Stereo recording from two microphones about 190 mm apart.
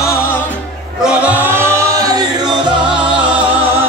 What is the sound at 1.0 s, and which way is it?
Music, 10° right (ahead or behind).